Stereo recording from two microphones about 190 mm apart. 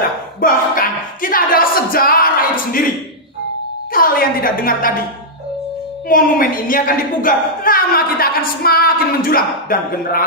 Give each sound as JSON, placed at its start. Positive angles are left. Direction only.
{"t": 0.4, "sound": "speech", "side_deg": 45}
{"t": 3.9, "sound": "speech", "side_deg": 50}
{"t": 6.0, "sound": "speech", "side_deg": 50}